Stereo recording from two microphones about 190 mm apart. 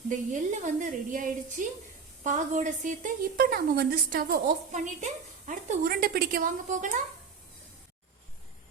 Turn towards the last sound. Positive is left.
turn(degrees=-40)  # may be behind; listen again after turning